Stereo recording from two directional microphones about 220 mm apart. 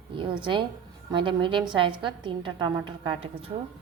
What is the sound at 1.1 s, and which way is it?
A woman's voice, 20° right (ahead or behind).